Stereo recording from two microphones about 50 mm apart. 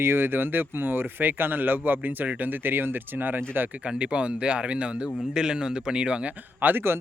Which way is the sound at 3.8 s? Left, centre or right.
Right.